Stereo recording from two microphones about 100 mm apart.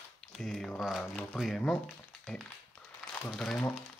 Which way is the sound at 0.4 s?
5° left (ahead or behind).